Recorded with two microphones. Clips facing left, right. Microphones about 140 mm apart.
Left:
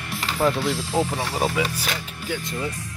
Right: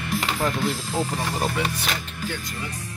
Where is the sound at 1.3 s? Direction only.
5° left (ahead or behind).